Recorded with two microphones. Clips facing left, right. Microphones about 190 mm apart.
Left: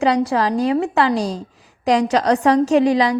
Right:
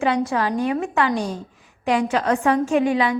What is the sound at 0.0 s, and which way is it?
A woman's voice, 35° left (ahead or behind).